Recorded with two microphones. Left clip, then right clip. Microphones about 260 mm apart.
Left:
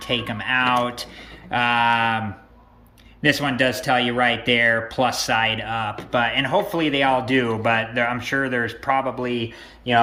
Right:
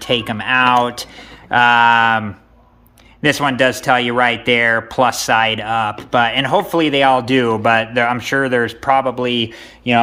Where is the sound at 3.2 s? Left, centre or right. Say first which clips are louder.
Right 5 dB; centre.